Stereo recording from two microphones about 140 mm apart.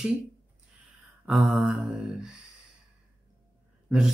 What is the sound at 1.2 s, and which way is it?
Speech, centre (ahead or behind).